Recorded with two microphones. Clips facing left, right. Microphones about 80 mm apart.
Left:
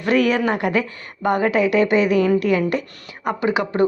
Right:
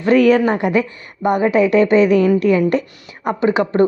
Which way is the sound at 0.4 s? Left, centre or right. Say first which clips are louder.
Right 4 dB; right.